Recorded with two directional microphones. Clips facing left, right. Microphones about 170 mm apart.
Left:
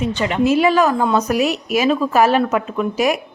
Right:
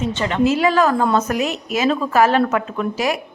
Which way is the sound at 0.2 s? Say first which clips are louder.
Left 2 dB; 15° left (ahead or behind).